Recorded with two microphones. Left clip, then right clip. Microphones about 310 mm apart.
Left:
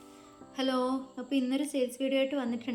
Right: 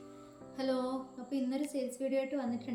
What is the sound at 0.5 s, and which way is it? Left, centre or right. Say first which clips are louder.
Music: left 3 dB; centre.